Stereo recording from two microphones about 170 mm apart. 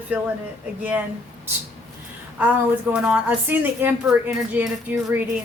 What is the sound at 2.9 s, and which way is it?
A woman's voice, 10° right (ahead or behind).